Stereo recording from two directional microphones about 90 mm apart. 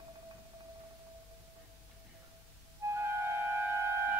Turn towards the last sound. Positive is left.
turn(degrees=-30)  # may be behind; listen again after turning